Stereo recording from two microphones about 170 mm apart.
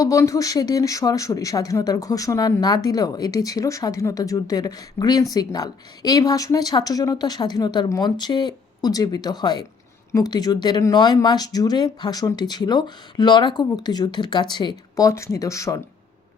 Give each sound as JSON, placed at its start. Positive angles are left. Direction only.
{"t": 0.0, "sound": "speech", "side_deg": 20}